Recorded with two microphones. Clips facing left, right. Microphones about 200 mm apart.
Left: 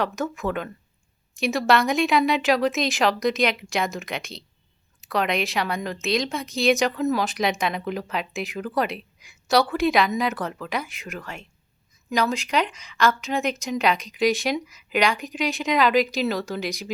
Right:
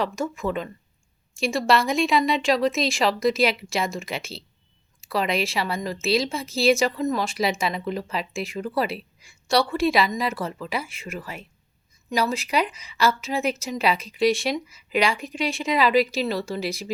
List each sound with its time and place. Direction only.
0.0 s a woman's voice: centre (ahead or behind)